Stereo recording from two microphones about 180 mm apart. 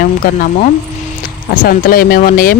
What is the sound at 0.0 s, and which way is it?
Speech, 50° left (ahead or behind).